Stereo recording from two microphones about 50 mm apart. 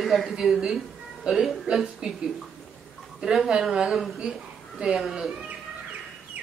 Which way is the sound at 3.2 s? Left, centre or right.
Centre.